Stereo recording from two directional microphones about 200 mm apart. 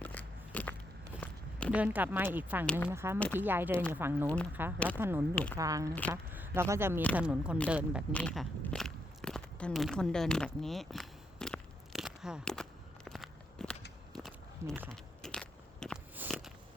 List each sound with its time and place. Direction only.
0.0 s biting: 10° left (ahead or behind)
1.2 s a sound: 5° left (ahead or behind)
1.7 s speech: 10° right (ahead or behind)
5.3 s speech: 5° left (ahead or behind)
5.5 s speech: 15° right (ahead or behind)
8.1 s walk: 5° left (ahead or behind)
15.2 s biting: 5° left (ahead or behind)
16.1 s walk: 5° right (ahead or behind)